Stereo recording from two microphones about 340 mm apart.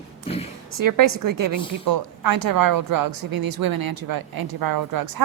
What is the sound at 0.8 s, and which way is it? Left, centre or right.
A woman's voice, right.